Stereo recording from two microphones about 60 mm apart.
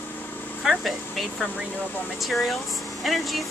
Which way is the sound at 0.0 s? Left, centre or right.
Left.